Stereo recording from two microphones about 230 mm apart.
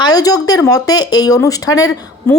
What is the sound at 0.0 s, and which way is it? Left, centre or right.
Speech, centre.